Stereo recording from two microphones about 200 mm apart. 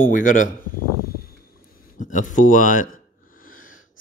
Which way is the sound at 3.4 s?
45° left (ahead or behind).